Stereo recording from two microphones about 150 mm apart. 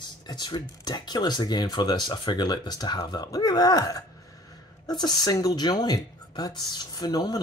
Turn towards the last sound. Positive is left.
turn(degrees=25)  # may be behind; listen again after turning